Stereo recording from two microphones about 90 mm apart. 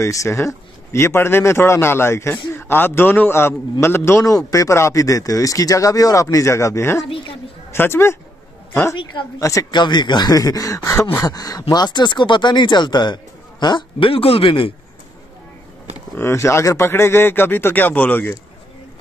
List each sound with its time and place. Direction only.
0.0 s a man's voice: 35° left (ahead or behind)
9.4 s speech: 35° left (ahead or behind)
9.7 s speech: 55° left (ahead or behind); by 14.7 s 75° left (ahead or behind)
16.2 s a man's voice: 30° left (ahead or behind)